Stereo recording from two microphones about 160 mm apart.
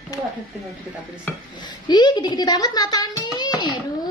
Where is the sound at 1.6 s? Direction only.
25° left (ahead or behind).